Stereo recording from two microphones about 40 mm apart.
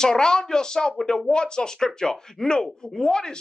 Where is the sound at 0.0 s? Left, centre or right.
Centre.